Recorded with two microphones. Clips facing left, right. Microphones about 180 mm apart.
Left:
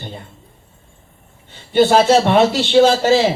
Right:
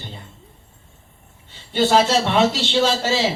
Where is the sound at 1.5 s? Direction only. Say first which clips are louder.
Left 5 dB; 55° left (ahead or behind).